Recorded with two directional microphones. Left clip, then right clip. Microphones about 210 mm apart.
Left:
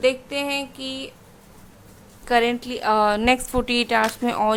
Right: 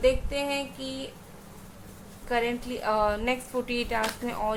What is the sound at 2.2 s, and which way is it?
A woman's voice, 45° left (ahead or behind).